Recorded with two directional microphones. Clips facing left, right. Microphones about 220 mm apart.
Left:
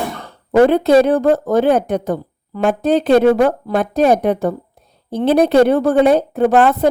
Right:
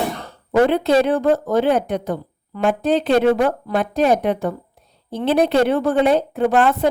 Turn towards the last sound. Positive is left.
turn(degrees=40)  # may be behind; listen again after turning